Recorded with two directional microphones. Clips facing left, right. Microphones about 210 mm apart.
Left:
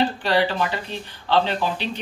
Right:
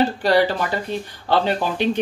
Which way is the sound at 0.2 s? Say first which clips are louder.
Right 4 dB; 40° right (ahead or behind).